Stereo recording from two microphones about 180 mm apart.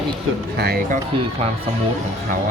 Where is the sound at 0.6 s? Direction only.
65° right (ahead or behind).